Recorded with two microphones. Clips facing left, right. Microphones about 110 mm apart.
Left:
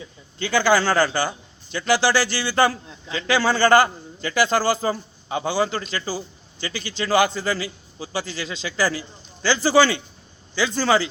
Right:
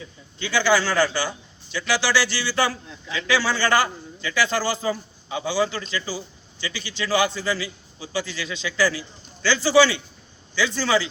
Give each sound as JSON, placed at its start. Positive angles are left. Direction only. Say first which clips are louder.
{"t": 0.3, "sound": "a man's voice", "louder": "left 2 dB", "side_deg": 45}